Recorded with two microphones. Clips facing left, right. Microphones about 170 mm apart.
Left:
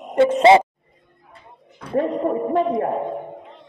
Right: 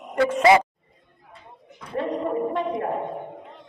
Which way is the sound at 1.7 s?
60° left (ahead or behind).